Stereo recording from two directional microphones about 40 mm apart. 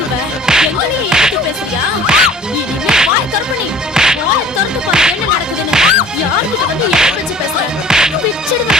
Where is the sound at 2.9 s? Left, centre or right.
Right.